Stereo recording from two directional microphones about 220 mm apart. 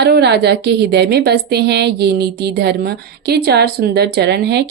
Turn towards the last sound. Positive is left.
turn(degrees=-50)  # may be behind; listen again after turning